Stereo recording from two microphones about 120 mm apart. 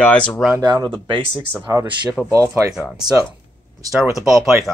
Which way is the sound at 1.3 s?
20° right (ahead or behind).